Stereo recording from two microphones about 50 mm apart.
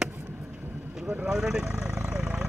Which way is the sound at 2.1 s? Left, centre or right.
Right.